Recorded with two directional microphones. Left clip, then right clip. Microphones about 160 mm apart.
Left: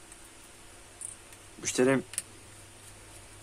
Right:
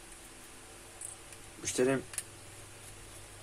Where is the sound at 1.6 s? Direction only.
35° left (ahead or behind).